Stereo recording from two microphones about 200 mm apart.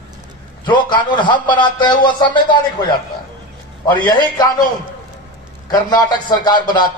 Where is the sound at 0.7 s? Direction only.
25° left (ahead or behind).